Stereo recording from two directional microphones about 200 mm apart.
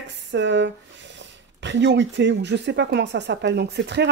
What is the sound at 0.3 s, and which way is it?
Speech, 60° right (ahead or behind).